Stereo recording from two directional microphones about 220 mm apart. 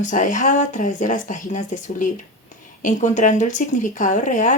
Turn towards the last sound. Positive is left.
turn(degrees=35)  # may be behind; listen again after turning